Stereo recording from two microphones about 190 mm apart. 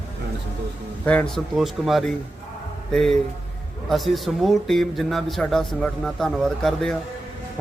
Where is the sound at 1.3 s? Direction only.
Centre (ahead or behind).